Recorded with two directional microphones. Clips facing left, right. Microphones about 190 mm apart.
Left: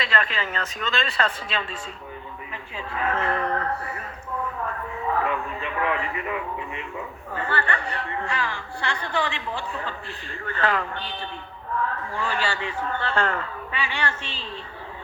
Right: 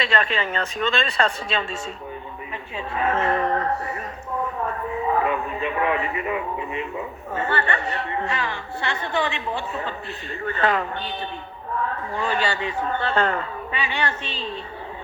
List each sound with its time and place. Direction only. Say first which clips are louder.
0.0 s a man's voice: right 4 dB; 25° right (ahead or behind)